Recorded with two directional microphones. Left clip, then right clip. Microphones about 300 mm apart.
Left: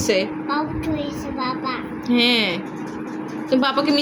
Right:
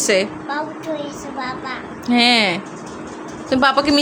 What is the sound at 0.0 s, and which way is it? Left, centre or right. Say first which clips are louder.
Speech: right 3 dB; right.